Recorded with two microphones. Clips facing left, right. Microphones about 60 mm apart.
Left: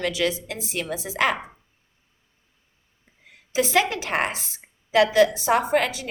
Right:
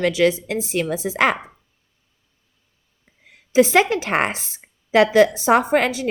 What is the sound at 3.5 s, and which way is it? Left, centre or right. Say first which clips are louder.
A woman's voice: right 6 dB; right.